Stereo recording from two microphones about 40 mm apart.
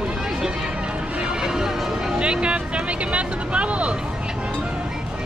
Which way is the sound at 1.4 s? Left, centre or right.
Centre.